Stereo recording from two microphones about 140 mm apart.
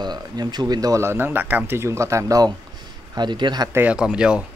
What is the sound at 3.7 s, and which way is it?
Speech, 10° right (ahead or behind).